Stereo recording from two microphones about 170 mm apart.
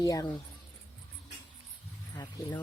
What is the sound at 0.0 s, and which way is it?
Speech, 20° left (ahead or behind).